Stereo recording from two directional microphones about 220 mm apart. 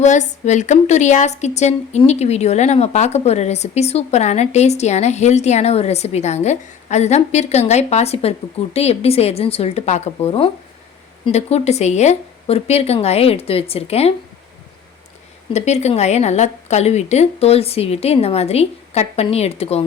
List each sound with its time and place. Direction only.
0.0 s a woman's voice: 35° left (ahead or behind)
15.5 s speech: 30° left (ahead or behind)